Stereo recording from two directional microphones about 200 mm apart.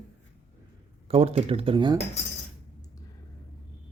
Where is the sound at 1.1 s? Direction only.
30° right (ahead or behind).